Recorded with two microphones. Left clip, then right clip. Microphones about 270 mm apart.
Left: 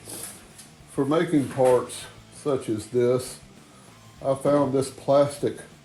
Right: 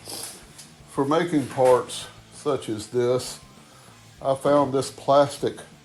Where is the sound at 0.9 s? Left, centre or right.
Right.